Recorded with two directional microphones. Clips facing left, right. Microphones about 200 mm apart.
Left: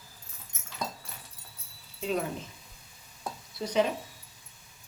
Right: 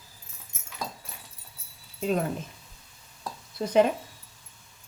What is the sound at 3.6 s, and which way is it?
Speech, 45° right (ahead or behind).